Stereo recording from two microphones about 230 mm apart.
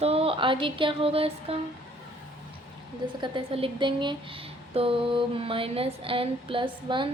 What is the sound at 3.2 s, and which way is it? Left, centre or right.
A woman's voice, right.